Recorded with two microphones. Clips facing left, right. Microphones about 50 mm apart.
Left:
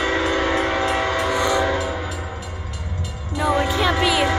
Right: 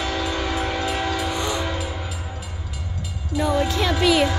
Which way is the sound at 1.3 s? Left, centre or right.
Left.